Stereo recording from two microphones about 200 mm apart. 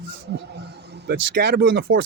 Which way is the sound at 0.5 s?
55° right (ahead or behind).